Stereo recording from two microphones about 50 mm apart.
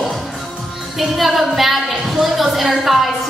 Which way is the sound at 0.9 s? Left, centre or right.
Centre.